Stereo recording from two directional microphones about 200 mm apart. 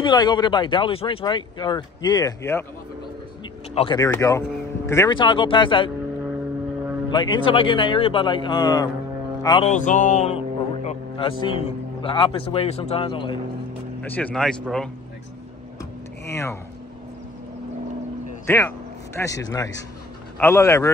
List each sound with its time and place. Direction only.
0.0 s speech: 20° left (ahead or behind)
3.7 s speech: 25° left (ahead or behind)
4.1 s speech: 15° left (ahead or behind)
7.1 s speech: 25° left (ahead or behind)
9.4 s mantra: 20° left (ahead or behind)
9.7 s speech: 40° left (ahead or behind)
14.0 s speech: 10° left (ahead or behind)
16.3 s speech: 15° left (ahead or behind)
18.5 s speech: 10° left (ahead or behind)